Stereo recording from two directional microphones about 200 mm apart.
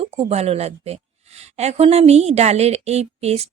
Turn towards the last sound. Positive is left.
turn(degrees=-30)  # may be behind; listen again after turning